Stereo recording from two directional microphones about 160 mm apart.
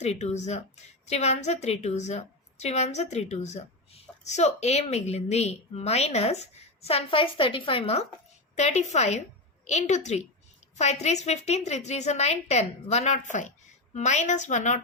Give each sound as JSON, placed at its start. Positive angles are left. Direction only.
{"t": 0.0, "sound": "a woman's voice", "side_deg": 45}